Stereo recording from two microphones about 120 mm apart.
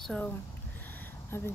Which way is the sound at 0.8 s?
15° left (ahead or behind).